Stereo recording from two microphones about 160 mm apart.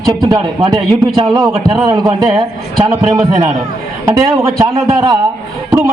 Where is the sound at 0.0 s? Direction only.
25° right (ahead or behind).